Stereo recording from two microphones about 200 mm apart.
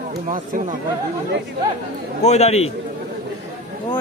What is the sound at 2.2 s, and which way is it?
Speech, 35° left (ahead or behind).